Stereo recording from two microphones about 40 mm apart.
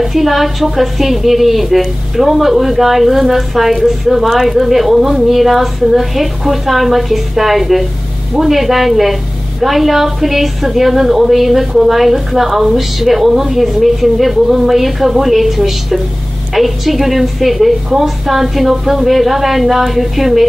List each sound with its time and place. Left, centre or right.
0.0 s a woman's voice: centre